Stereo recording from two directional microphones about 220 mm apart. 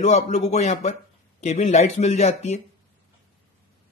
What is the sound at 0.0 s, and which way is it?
Speech, 30° left (ahead or behind).